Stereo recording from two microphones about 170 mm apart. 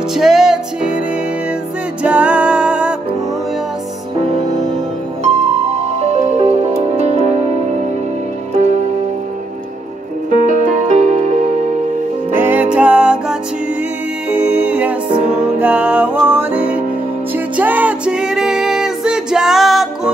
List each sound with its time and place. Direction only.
0.1 s music: centre (ahead or behind)
2.0 s music: 5° right (ahead or behind)
5.9 s music: 40° right (ahead or behind)
10.3 s music: 50° right (ahead or behind)
12.4 s music: 10° right (ahead or behind)